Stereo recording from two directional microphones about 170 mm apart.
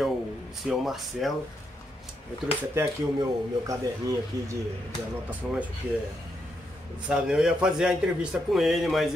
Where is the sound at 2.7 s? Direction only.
15° right (ahead or behind).